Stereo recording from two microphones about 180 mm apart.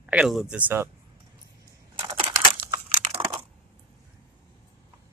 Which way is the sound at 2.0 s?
30° right (ahead or behind).